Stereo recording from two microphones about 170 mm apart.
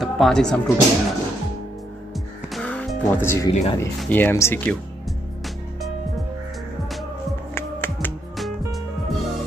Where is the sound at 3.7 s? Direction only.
15° left (ahead or behind).